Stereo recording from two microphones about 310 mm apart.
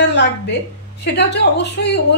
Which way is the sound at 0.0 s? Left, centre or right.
Left.